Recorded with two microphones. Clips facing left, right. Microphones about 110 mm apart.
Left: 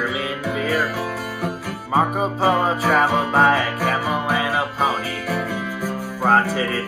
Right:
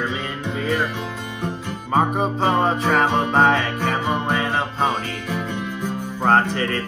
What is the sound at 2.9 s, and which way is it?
Music, 20° right (ahead or behind).